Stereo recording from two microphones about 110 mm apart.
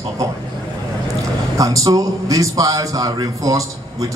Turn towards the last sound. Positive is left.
turn(degrees=-30)  # may be behind; listen again after turning